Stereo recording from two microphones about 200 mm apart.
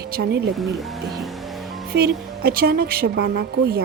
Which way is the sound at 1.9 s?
55° right (ahead or behind).